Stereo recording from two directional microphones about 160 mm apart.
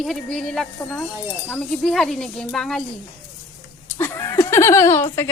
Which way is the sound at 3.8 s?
15° left (ahead or behind).